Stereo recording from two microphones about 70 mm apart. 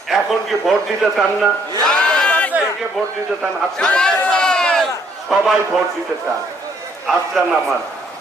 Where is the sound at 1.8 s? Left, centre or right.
Centre.